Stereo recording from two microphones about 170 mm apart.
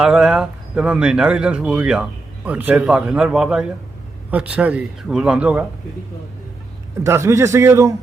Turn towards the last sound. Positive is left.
turn(degrees=-15)  # may be behind; listen again after turning